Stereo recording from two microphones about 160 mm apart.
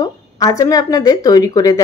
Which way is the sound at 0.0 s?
20° left (ahead or behind).